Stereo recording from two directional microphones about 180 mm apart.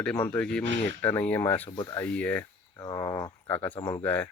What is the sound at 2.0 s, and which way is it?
Speech, 10° left (ahead or behind).